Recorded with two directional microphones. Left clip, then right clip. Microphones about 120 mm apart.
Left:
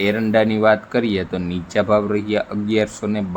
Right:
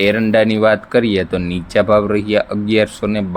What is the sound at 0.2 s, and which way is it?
Speech, 45° right (ahead or behind).